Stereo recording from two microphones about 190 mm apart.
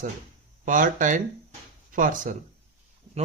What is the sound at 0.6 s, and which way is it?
Speech, 45° right (ahead or behind).